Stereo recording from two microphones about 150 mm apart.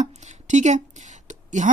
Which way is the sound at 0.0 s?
55° right (ahead or behind).